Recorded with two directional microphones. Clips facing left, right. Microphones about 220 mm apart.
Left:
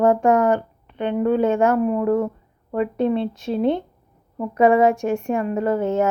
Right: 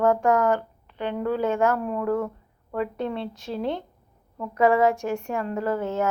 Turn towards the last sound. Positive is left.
turn(degrees=20)  # may be behind; listen again after turning